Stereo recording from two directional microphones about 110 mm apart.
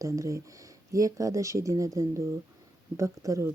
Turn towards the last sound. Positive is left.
turn(degrees=-30)  # may be behind; listen again after turning